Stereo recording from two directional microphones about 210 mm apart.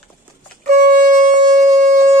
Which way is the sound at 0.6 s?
40° right (ahead or behind).